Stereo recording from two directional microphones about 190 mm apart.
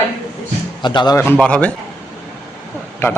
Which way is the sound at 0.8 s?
25° left (ahead or behind).